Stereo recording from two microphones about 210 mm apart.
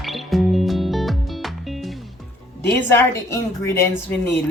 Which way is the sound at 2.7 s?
10° left (ahead or behind).